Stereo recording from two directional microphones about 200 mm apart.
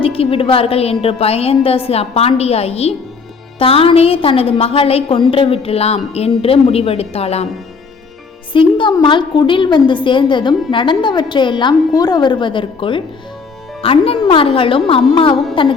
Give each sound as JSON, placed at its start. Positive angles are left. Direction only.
{"t": 0.0, "sound": "a woman's voice", "side_deg": 30}
{"t": 8.5, "sound": "a woman's voice", "side_deg": 25}